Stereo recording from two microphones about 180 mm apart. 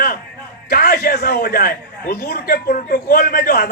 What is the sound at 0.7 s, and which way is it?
A man's voice, 60° left (ahead or behind).